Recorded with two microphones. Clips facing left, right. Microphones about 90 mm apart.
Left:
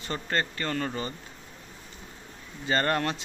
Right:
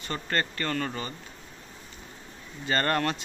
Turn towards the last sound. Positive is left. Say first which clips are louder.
# even
turn(degrees=15)  # may be behind; listen again after turning